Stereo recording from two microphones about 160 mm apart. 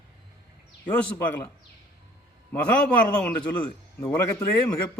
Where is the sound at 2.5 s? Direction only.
10° left (ahead or behind).